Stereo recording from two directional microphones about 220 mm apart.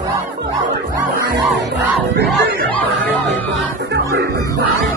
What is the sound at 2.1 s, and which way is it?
Music, 45° right (ahead or behind).